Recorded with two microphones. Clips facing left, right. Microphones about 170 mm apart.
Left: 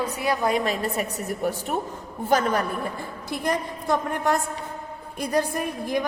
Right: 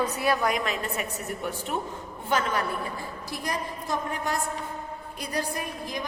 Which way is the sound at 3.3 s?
60° left (ahead or behind).